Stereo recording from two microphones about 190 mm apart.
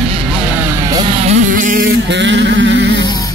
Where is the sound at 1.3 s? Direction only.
45° right (ahead or behind); by 2.9 s 70° right (ahead or behind).